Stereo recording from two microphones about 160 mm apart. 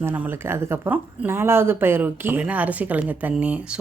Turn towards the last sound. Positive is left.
turn(degrees=-5)  # may be behind; listen again after turning